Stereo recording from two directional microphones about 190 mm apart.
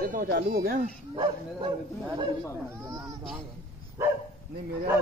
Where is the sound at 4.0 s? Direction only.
15° right (ahead or behind).